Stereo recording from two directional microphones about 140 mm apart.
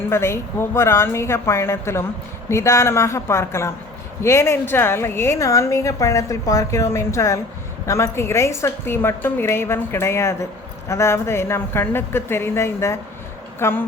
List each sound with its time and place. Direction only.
0.1 s a woman's voice: 20° left (ahead or behind)